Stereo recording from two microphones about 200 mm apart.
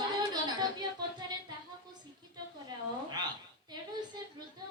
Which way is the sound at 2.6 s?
20° right (ahead or behind).